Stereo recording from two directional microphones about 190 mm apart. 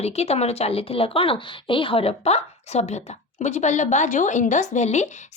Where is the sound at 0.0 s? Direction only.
35° left (ahead or behind).